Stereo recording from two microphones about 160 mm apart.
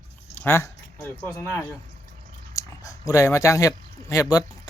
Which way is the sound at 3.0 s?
20° left (ahead or behind).